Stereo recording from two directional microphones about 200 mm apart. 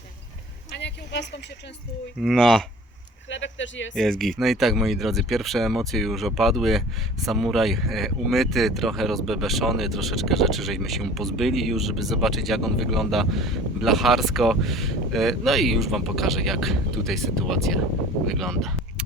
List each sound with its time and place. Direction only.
0.8 s a sound: 60° left (ahead or behind)
2.2 s speech: centre (ahead or behind)
3.2 s speech: 70° left (ahead or behind)
4.2 s speech: centre (ahead or behind)